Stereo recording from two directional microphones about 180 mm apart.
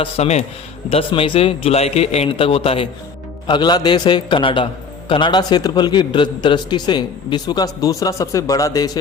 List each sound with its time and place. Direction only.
0.0 s a man's voice: 35° left (ahead or behind); by 8.9 s 20° left (ahead or behind)